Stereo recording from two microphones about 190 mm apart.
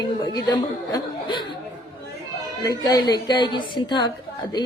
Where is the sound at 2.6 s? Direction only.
20° left (ahead or behind).